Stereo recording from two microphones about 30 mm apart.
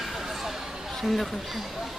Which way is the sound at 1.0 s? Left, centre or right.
Centre.